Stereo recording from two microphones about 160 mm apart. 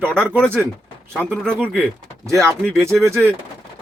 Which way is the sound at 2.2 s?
20° right (ahead or behind).